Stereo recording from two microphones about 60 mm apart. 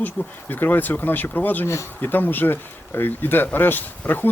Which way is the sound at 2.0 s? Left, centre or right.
Left.